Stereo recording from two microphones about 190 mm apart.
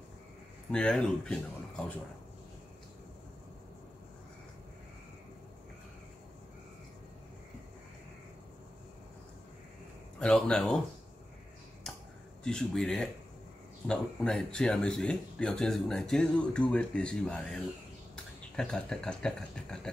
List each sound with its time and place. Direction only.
0.7 s speech: 5° left (ahead or behind)
10.1 s speech: 5° left (ahead or behind)
11.9 s a sound: 5° left (ahead or behind)
12.4 s speech: 5° left (ahead or behind)